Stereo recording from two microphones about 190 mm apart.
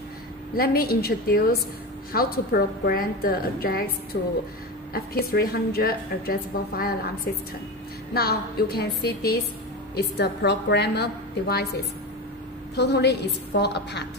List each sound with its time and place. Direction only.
0.6 s a woman's voice: 55° left (ahead or behind)
8.1 s a woman's voice: 55° left (ahead or behind)